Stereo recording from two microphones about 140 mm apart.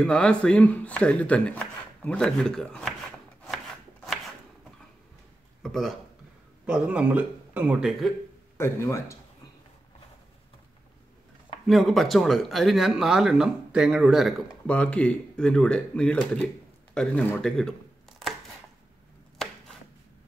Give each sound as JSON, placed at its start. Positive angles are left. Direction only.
{"t": 0.0, "sound": "speech", "side_deg": 5}
{"t": 3.4, "sound": "chopping", "side_deg": 0}
{"t": 5.6, "sound": "speech", "side_deg": 0}
{"t": 6.6, "sound": "speech", "side_deg": -10}
{"t": 8.5, "sound": "speech", "side_deg": 20}
{"t": 11.6, "sound": "speech", "side_deg": 0}
{"t": 14.7, "sound": "speech", "side_deg": 10}
{"t": 19.3, "sound": "chopping", "side_deg": 5}